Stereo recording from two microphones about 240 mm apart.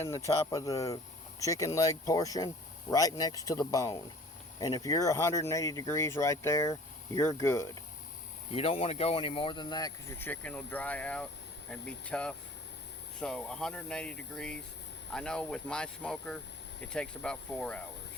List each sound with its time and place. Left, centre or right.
0.5 s speech: centre
8.5 s speech: left; by 17.8 s centre